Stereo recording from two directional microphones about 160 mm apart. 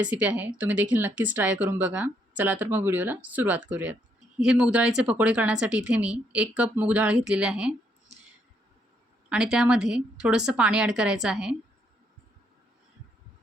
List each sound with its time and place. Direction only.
0.0 s speech: 10° right (ahead or behind)
9.3 s a woman's voice: 5° right (ahead or behind)